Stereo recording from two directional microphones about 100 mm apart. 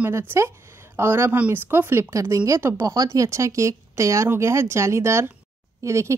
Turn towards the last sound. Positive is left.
turn(degrees=-30)  # may be behind; listen again after turning